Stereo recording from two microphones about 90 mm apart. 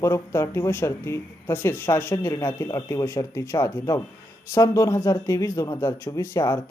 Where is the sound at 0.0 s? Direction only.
30° left (ahead or behind).